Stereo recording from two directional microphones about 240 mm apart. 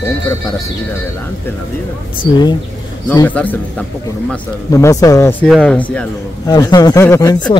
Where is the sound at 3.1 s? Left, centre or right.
Centre.